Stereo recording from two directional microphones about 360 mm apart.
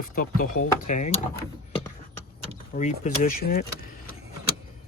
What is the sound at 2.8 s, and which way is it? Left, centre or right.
Speech, centre.